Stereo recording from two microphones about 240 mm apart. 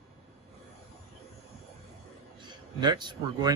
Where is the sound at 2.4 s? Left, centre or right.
Centre.